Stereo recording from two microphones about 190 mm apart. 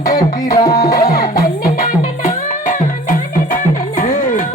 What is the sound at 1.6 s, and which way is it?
Music, 45° left (ahead or behind).